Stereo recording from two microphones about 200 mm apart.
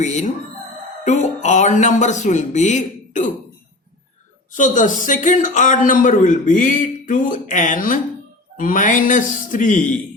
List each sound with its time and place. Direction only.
0.0 s a man's voice: 35° left (ahead or behind)
4.5 s a man's voice: 40° left (ahead or behind)